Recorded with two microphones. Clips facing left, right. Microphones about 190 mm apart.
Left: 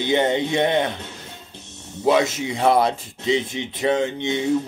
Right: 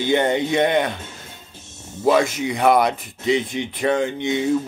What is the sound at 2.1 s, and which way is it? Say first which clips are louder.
Speech: right 1 dB; 25° left (ahead or behind).